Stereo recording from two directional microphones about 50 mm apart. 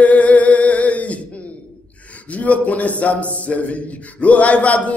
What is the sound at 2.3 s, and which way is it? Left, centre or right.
A man's voice, left.